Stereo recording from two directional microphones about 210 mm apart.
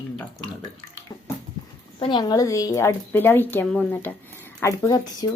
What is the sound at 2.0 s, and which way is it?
A woman's voice, 20° left (ahead or behind).